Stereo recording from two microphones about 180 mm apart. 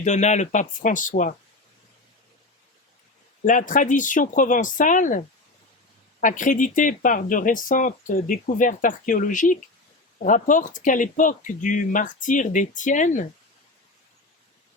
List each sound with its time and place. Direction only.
0.0 s speech: 40° left (ahead or behind)
3.4 s speech: 45° left (ahead or behind)